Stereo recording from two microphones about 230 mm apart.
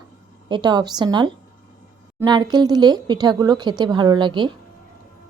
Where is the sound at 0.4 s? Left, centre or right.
Centre.